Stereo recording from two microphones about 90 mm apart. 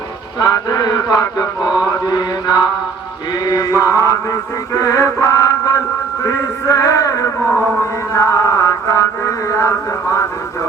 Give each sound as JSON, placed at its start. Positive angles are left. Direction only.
{"t": 0.3, "sound": "mantra", "side_deg": 45}
{"t": 3.4, "sound": "music", "side_deg": 45}
{"t": 6.2, "sound": "a sound", "side_deg": 40}
{"t": 8.1, "sound": "mantra", "side_deg": 35}